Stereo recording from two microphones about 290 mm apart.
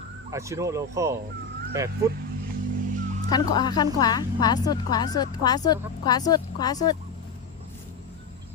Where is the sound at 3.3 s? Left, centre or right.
Centre.